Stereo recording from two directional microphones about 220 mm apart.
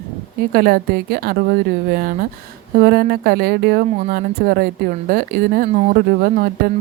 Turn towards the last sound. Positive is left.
turn(degrees=-40)  # may be behind; listen again after turning